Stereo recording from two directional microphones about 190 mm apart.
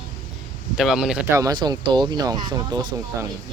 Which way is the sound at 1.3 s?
20° right (ahead or behind).